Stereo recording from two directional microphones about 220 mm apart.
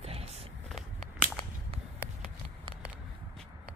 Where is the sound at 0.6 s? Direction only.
Centre (ahead or behind).